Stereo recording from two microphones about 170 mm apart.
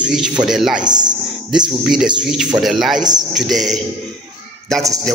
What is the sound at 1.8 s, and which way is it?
Speech, 5° right (ahead or behind).